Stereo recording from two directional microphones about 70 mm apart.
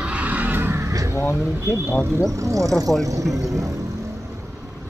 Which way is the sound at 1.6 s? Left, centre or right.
Right.